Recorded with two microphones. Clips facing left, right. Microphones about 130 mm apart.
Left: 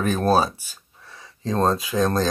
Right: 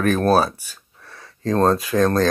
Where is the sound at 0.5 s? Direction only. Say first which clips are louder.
Right 2 dB; 25° left (ahead or behind).